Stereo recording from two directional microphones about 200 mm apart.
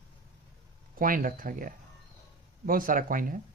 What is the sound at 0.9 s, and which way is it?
Speech, 45° right (ahead or behind).